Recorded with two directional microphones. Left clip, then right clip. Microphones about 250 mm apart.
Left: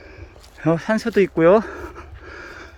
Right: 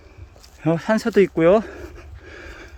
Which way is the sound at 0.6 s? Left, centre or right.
Centre.